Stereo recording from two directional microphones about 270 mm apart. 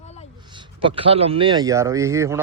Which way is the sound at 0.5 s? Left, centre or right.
Centre.